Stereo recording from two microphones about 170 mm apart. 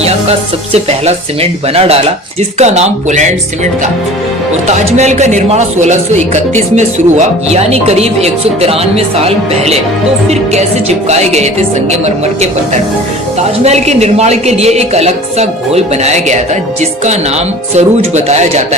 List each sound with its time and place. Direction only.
0.0 s speech: 40° right (ahead or behind)
4.7 s speech: 40° right (ahead or behind)
17.7 s speech: 40° right (ahead or behind)